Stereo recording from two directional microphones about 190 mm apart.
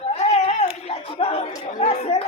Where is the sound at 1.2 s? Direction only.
30° left (ahead or behind).